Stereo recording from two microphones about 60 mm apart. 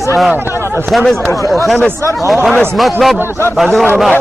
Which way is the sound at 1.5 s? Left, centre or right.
Centre.